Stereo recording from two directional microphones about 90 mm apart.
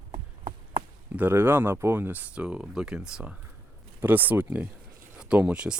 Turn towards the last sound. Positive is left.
turn(degrees=-10)  # may be behind; listen again after turning